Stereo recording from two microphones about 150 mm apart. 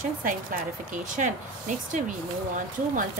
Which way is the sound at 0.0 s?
65° right (ahead or behind).